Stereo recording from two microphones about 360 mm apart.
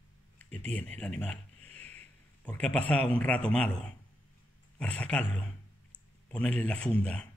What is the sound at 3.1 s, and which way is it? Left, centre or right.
Speech, centre.